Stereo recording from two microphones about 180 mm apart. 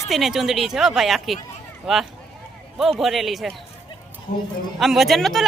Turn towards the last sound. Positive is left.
turn(degrees=0)  # may be behind; listen again after turning